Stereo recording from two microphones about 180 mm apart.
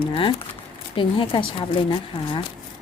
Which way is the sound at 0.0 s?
30° left (ahead or behind).